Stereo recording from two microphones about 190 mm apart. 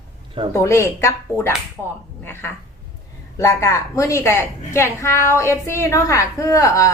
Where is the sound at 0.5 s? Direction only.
15° left (ahead or behind).